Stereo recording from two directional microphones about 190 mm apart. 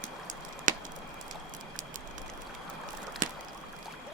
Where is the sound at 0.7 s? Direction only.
45° right (ahead or behind).